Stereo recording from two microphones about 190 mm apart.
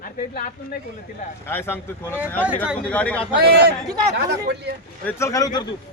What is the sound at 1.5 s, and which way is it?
Speech, 10° left (ahead or behind).